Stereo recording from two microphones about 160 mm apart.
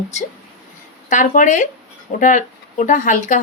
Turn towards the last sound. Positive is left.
turn(degrees=55)  # may be behind; listen again after turning